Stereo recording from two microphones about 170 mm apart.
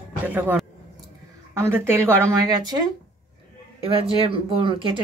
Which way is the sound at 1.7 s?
15° right (ahead or behind).